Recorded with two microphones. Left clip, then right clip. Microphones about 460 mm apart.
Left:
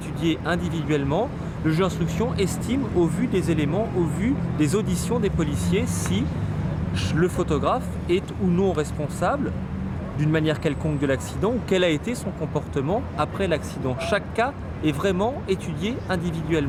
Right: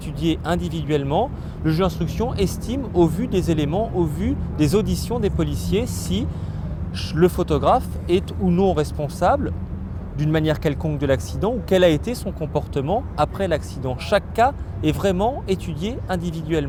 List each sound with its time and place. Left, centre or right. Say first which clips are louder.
0.2 s speech: right 2 dB; right